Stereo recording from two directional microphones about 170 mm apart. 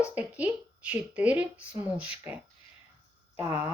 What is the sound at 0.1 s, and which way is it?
A woman's voice, 10° right (ahead or behind).